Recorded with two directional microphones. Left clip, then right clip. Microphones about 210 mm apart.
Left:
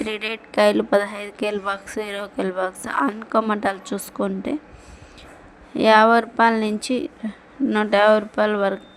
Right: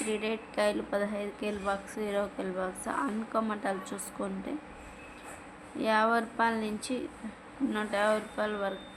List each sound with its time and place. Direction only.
0.1 s a woman's voice: 40° left (ahead or behind)
5.7 s a woman's voice: 40° left (ahead or behind)